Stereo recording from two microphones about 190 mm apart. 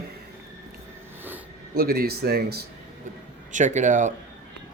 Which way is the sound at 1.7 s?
55° right (ahead or behind).